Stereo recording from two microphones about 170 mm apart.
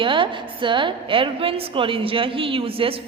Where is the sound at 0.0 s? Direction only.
30° right (ahead or behind).